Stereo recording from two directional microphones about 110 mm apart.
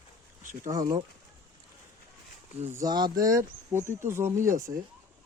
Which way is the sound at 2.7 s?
40° right (ahead or behind).